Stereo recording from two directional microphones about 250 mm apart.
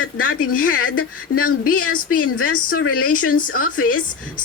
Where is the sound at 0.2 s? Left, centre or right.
Left.